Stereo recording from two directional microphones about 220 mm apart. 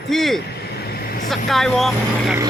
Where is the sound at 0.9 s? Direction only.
45° left (ahead or behind).